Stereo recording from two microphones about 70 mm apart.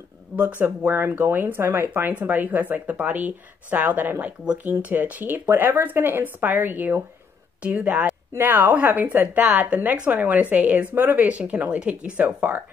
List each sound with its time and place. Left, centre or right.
0.4 s speech: centre